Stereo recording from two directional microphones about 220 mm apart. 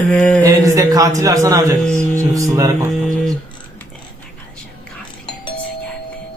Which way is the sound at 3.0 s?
Centre (ahead or behind).